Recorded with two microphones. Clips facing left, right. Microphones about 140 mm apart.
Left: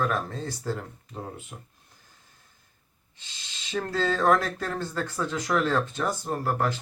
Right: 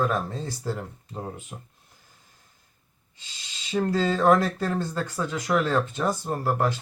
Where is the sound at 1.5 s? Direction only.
20° right (ahead or behind).